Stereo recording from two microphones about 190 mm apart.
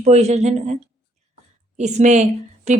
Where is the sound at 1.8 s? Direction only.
35° right (ahead or behind).